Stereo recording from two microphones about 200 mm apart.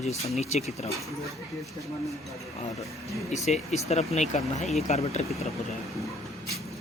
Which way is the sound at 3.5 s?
35° left (ahead or behind).